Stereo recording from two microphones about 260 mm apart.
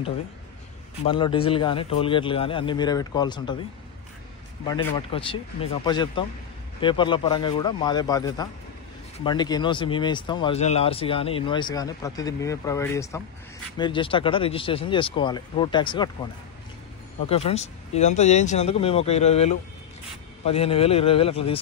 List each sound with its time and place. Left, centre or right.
1.0 s speech: centre
4.6 s speech: centre
17.3 s speech: left